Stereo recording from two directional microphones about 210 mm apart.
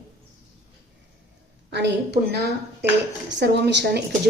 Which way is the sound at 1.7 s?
55° right (ahead or behind).